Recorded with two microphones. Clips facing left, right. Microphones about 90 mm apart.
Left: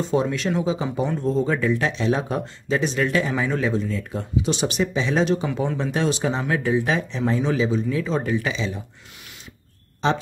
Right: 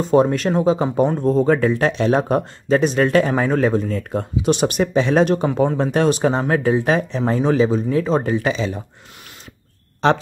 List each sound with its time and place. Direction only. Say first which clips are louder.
0.1 s speech: right 8 dB; 45° right (ahead or behind)
10.0 s speech: right 6 dB; 65° right (ahead or behind)